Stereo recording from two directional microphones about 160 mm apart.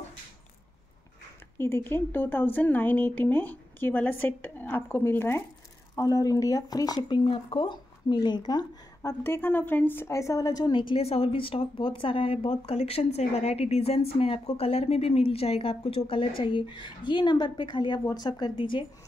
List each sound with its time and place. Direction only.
1.6 s speech: 15° left (ahead or behind)
7.2 s speech: 35° left (ahead or behind)
9.2 s a woman's voice: 10° left (ahead or behind); by 18.9 s 30° left (ahead or behind)